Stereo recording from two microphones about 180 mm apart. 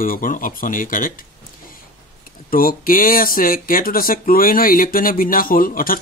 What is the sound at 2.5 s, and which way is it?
Speech, 50° left (ahead or behind).